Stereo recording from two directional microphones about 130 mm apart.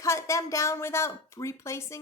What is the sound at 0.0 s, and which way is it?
A woman's voice, 25° left (ahead or behind).